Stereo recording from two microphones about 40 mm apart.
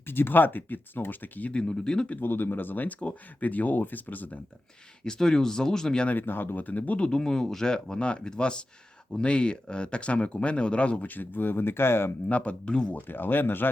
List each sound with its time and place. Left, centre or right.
0.0 s speech: left
1.5 s speech: left
2.2 s speech: left
5.0 s speech: centre
6.1 s speech: left
7.0 s speech: centre
7.9 s speech: left
11.0 s speech: left
12.3 s speech: left
13.1 s speech: left